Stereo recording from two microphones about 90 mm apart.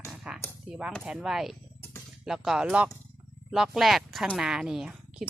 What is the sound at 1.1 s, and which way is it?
A woman's voice, 5° right (ahead or behind).